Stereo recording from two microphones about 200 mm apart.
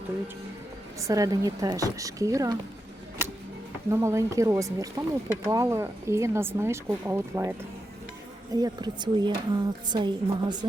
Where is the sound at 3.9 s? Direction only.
15° right (ahead or behind).